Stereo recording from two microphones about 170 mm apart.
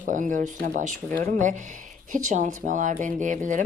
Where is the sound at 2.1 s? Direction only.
45° right (ahead or behind).